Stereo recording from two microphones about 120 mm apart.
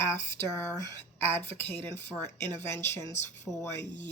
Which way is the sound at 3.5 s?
Centre (ahead or behind).